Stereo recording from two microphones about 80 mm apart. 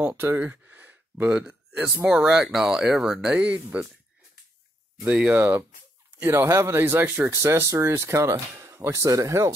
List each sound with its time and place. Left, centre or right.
0.2 s speech: right
2.0 s speech: centre
3.3 s speech: centre
5.0 s speech: centre; by 9.5 s right